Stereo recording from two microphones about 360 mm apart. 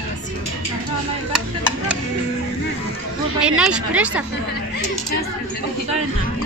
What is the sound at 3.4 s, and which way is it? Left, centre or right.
Speech, centre.